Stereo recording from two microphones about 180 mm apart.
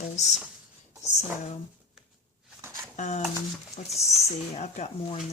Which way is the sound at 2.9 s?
40° left (ahead or behind).